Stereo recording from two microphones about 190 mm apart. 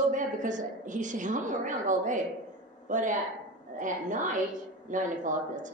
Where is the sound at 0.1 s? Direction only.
40° right (ahead or behind).